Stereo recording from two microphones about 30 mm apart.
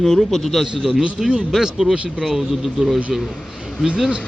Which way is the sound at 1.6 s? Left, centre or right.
Centre.